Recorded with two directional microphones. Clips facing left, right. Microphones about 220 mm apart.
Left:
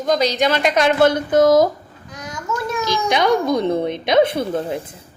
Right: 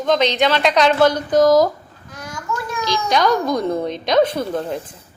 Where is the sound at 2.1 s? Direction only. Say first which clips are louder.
Left 1 dB; 20° left (ahead or behind).